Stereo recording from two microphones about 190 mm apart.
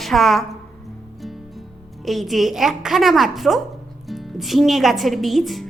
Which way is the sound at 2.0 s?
Centre (ahead or behind).